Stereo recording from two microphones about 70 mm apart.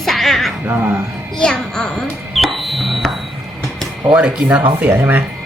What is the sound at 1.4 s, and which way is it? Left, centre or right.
Speech, centre.